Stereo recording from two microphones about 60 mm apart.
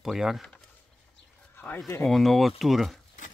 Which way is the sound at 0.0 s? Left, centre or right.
Centre.